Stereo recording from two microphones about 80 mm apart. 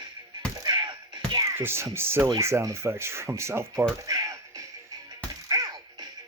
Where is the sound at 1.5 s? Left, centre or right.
Right.